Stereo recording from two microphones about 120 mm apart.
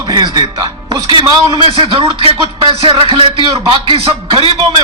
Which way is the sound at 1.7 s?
45° right (ahead or behind).